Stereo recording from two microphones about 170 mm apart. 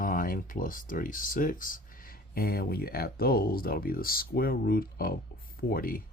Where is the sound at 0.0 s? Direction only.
55° left (ahead or behind).